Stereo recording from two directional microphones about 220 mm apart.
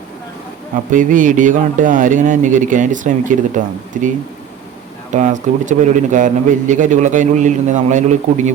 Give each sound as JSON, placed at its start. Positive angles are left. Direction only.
{"t": 0.9, "sound": "speech", "side_deg": -35}
{"t": 5.1, "sound": "speech", "side_deg": -35}